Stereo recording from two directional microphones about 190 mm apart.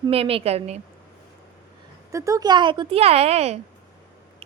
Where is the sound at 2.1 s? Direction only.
15° right (ahead or behind); by 3.6 s 35° right (ahead or behind).